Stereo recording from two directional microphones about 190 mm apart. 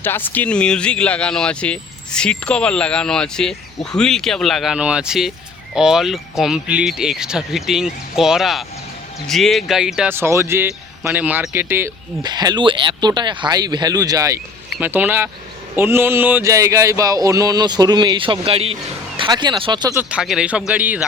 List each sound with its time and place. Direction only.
0.0 s speech: 10° left (ahead or behind); by 15.3 s 10° right (ahead or behind)
15.7 s a sound: 10° right (ahead or behind)
20.0 s speech: 5° right (ahead or behind)